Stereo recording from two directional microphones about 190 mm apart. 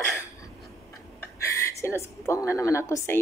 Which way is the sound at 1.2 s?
15° left (ahead or behind).